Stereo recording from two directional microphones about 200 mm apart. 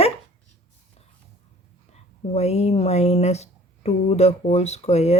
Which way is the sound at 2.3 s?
30° left (ahead or behind).